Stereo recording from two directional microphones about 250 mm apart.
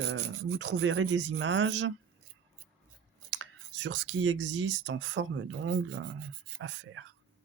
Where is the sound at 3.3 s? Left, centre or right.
Right.